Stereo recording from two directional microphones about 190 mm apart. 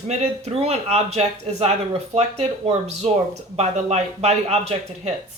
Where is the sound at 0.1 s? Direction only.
35° right (ahead or behind).